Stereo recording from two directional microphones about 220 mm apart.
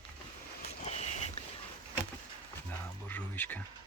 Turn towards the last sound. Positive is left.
turn(degrees=5)  # may be behind; listen again after turning